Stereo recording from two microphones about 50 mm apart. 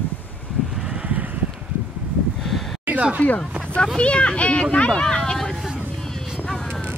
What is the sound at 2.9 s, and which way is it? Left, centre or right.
Speech, right.